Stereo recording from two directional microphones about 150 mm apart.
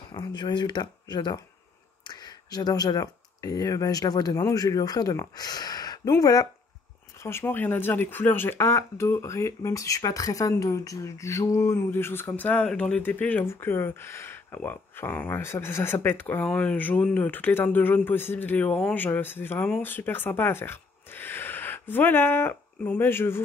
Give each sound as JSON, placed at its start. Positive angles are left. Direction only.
{"t": 0.1, "sound": "speech", "side_deg": 30}
{"t": 7.2, "sound": "speech", "side_deg": 15}